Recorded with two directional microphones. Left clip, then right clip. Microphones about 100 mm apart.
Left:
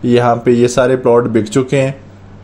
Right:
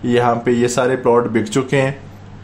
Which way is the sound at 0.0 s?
25° left (ahead or behind).